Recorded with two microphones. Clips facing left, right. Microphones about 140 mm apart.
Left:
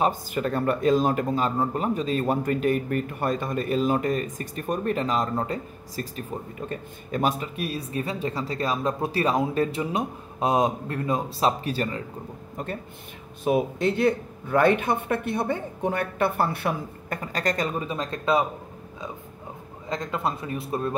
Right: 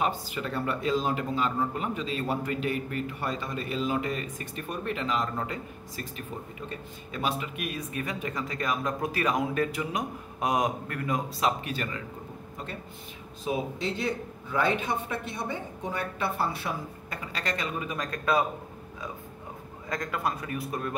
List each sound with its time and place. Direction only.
0.0 s speech: 45° left (ahead or behind)
13.4 s a man's voice: 55° left (ahead or behind)
17.8 s speech: 25° left (ahead or behind)
19.9 s speech: 25° left (ahead or behind)